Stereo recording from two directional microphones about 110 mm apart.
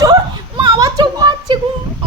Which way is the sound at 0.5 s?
40° right (ahead or behind).